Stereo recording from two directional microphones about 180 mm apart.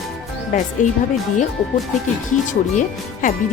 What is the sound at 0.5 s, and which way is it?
Speech, 45° left (ahead or behind).